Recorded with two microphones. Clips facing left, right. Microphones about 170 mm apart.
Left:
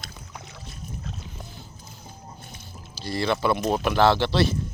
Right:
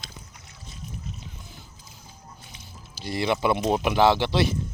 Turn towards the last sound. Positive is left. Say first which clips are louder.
# even
turn(degrees=-15)  # may be behind; listen again after turning